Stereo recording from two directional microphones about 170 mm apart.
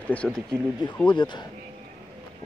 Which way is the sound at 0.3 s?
20° right (ahead or behind).